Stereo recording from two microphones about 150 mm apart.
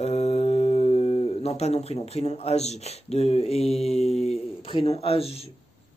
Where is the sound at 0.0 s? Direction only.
45° left (ahead or behind).